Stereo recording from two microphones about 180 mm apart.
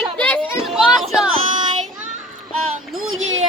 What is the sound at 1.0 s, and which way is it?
Speech, centre (ahead or behind).